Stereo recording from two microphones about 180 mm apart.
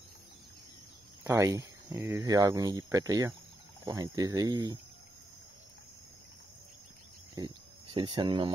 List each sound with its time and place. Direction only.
1.2 s speech: 15° right (ahead or behind)
7.3 s speech: 25° right (ahead or behind)